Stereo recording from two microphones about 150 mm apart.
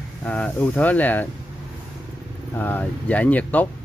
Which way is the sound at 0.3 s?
5° left (ahead or behind).